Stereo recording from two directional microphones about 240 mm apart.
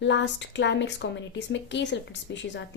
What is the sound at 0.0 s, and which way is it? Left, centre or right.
Speech, left.